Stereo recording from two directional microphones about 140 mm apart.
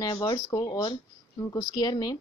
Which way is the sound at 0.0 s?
30° left (ahead or behind).